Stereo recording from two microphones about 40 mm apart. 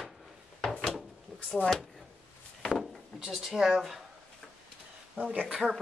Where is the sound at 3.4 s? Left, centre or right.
Centre.